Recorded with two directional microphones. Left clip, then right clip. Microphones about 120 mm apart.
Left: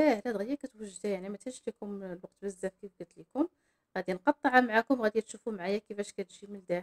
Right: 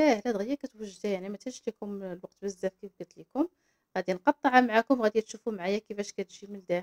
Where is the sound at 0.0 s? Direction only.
25° right (ahead or behind).